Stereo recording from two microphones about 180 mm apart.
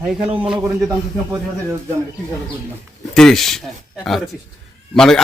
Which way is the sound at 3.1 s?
Centre (ahead or behind).